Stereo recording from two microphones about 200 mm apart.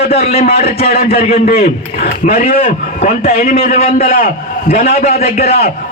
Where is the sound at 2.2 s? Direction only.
45° left (ahead or behind).